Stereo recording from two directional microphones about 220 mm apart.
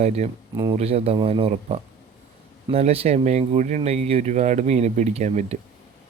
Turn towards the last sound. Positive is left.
turn(degrees=-30)  # may be behind; listen again after turning